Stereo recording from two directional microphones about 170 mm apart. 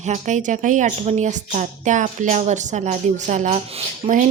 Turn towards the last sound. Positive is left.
turn(degrees=-45)  # may be behind; listen again after turning